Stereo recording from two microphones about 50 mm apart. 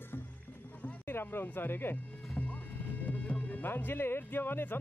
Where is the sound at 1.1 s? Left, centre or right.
Left.